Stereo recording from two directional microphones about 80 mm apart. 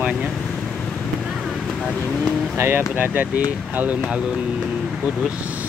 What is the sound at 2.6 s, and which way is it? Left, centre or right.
Speech, right.